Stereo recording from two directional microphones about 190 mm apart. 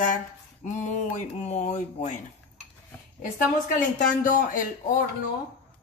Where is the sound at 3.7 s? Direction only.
45° left (ahead or behind).